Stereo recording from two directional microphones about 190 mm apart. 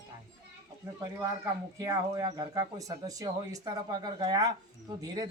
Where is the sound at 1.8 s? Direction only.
15° right (ahead or behind).